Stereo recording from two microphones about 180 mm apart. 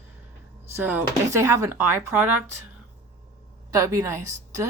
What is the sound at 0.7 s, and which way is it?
Speech, 10° right (ahead or behind).